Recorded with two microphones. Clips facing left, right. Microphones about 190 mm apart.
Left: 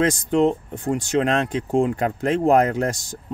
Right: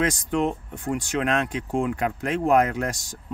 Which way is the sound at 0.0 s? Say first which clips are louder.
Left 5 dB; 25° left (ahead or behind).